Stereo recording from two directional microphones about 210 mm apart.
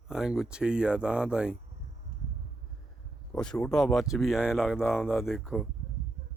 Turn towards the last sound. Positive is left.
turn(degrees=0)  # may be behind; listen again after turning